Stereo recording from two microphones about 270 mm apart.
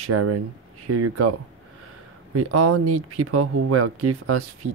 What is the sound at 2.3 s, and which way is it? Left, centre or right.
Speech, right.